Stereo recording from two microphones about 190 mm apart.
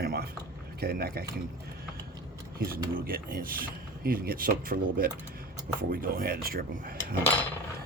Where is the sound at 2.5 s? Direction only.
55° right (ahead or behind).